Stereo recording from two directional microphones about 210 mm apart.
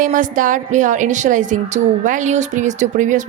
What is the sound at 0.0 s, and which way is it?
A woman's voice, 40° right (ahead or behind).